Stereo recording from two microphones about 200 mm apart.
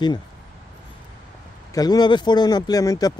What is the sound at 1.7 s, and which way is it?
Speech, 20° left (ahead or behind).